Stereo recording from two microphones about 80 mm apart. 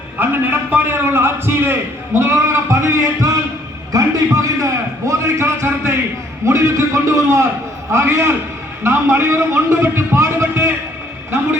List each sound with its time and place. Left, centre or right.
0.2 s a man's voice: right